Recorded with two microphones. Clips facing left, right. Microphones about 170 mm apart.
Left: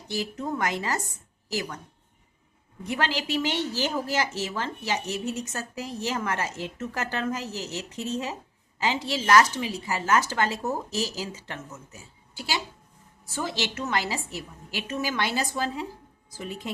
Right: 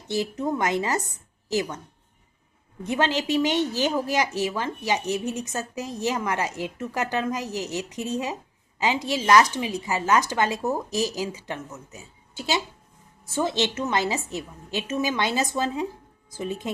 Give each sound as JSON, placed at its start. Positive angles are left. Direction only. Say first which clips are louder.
{"t": 0.1, "sound": "a woman's voice", "louder": "right 4 dB", "side_deg": -20}
{"t": 2.8, "sound": "a woman's voice", "louder": "right 4 dB", "side_deg": -20}